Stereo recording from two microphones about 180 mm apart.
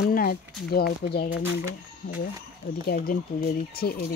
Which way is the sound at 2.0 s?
50° left (ahead or behind).